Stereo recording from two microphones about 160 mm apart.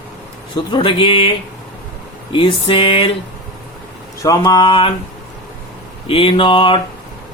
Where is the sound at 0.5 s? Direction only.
30° left (ahead or behind).